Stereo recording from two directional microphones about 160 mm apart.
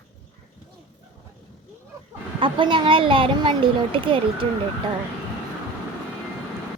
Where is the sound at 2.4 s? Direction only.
30° right (ahead or behind).